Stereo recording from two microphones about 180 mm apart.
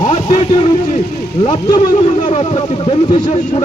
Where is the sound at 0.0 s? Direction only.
30° left (ahead or behind).